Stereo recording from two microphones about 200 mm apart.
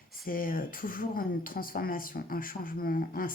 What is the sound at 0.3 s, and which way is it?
Speech, 45° left (ahead or behind).